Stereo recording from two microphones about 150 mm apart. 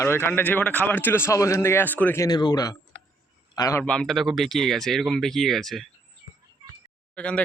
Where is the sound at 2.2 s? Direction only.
25° left (ahead or behind).